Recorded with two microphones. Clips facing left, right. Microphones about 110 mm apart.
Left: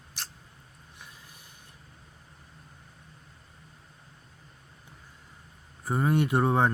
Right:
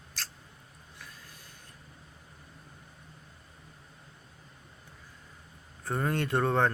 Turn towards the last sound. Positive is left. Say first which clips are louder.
# left 2 dB
turn(degrees=15)  # may be behind; listen again after turning